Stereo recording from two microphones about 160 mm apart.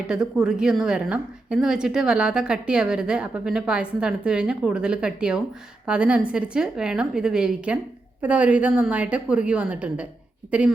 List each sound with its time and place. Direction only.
0.1 s a woman's voice: 5° right (ahead or behind)